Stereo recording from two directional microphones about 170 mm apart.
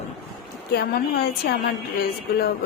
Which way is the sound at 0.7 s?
65° left (ahead or behind).